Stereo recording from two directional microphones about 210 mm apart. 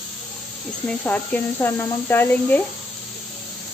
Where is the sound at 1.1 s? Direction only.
10° left (ahead or behind).